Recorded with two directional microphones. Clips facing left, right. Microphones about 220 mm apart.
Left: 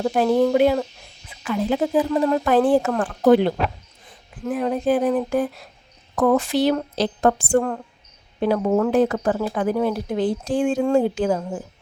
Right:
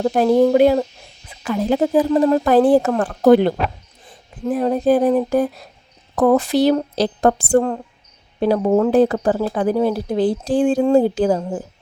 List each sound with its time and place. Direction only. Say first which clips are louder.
0.0 s speech: right 3 dB; 40° right (ahead or behind)
0.3 s speech: right 5 dB; 25° right (ahead or behind)
0.5 s speech: right 4 dB; 40° right (ahead or behind)